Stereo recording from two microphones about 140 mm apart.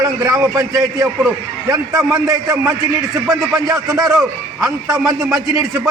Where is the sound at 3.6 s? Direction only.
25° right (ahead or behind).